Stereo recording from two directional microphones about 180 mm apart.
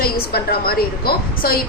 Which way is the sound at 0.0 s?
60° left (ahead or behind).